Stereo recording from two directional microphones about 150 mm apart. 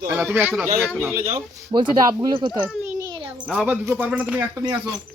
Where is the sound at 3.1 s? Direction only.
30° right (ahead or behind).